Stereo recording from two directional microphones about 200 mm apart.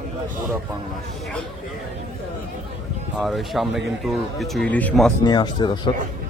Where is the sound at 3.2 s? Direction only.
Centre (ahead or behind).